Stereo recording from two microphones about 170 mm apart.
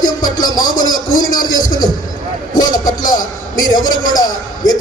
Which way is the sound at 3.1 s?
20° left (ahead or behind).